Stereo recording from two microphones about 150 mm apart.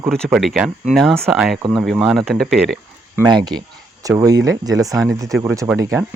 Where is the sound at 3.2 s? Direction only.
30° right (ahead or behind).